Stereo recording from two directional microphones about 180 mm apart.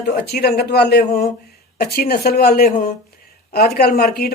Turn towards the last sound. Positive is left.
turn(degrees=55)  # may be behind; listen again after turning